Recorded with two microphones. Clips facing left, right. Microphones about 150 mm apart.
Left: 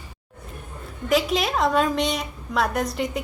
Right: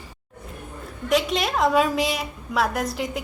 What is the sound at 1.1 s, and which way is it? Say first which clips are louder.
A woman's voice: left 1 dB; centre (ahead or behind).